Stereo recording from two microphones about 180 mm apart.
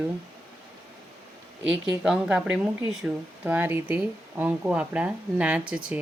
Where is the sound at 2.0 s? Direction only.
5° right (ahead or behind).